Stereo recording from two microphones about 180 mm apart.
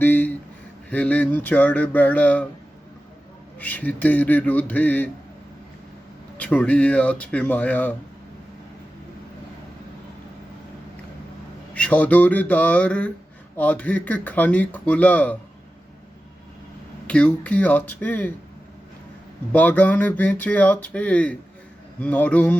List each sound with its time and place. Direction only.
0.0 s a sound: 10° left (ahead or behind)
0.9 s speech: 5° left (ahead or behind)
3.6 s speech: 10° left (ahead or behind)
6.3 s speech: 10° left (ahead or behind)
11.7 s speech: 5° left (ahead or behind)
17.1 s speech: 5° left (ahead or behind)
19.5 s speech: 10° left (ahead or behind)